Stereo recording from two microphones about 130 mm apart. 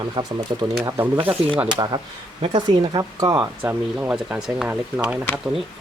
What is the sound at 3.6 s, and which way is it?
Speech, 10° right (ahead or behind).